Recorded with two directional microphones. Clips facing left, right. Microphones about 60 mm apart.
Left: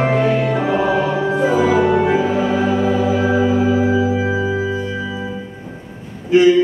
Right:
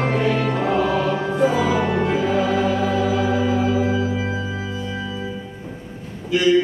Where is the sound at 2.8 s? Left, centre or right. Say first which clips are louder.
Left 3 dB; left.